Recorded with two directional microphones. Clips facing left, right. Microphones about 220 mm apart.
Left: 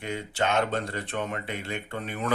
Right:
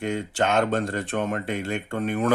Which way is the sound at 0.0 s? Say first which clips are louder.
Right 4 dB; 50° right (ahead or behind).